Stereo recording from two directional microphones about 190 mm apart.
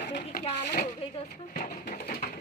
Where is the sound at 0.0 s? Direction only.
60° left (ahead or behind).